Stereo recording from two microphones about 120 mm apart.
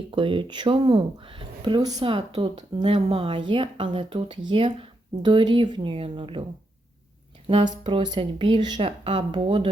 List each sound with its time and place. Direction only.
0.1 s speech: 45° right (ahead or behind)
2.0 s speech: 45° right (ahead or behind)
7.5 s speech: 40° right (ahead or behind)